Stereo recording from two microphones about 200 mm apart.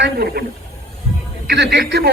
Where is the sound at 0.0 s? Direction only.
55° right (ahead or behind).